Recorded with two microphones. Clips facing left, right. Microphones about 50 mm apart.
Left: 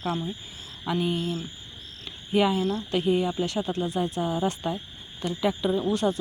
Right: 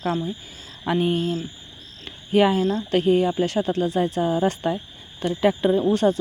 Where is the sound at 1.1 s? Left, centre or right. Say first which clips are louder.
Right 5 dB; right.